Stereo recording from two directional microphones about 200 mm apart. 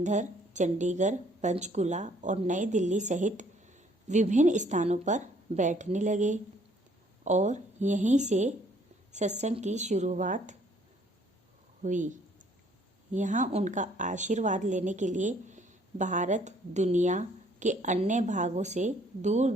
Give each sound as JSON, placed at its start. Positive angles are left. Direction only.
{"t": 0.0, "sound": "a woman's voice", "side_deg": -35}
{"t": 11.8, "sound": "a woman's voice", "side_deg": -40}
{"t": 13.1, "sound": "a woman's voice", "side_deg": -40}